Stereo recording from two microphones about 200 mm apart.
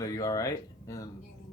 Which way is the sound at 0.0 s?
15° left (ahead or behind).